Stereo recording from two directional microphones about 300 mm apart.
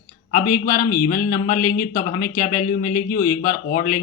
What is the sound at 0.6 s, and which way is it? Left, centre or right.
Speech, left.